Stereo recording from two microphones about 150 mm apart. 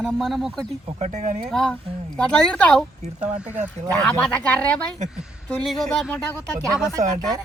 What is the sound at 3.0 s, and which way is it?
Speech, 50° right (ahead or behind).